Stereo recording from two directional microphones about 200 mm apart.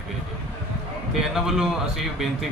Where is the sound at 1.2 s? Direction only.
Centre (ahead or behind).